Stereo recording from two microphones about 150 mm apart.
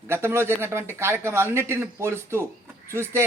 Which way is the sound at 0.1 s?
15° right (ahead or behind).